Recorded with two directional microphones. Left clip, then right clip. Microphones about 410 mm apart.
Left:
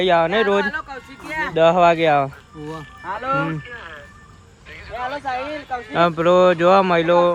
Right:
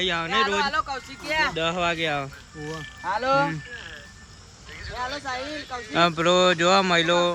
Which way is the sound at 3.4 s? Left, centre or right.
Centre.